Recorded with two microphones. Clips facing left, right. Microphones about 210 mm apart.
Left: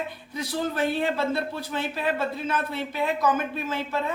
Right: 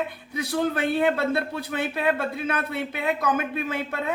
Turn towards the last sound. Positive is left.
turn(degrees=-60)  # may be behind; listen again after turning